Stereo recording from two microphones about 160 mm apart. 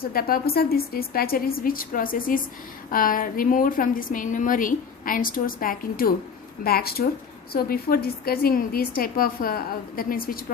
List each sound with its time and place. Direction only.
0.0 s a woman's voice: 70° left (ahead or behind)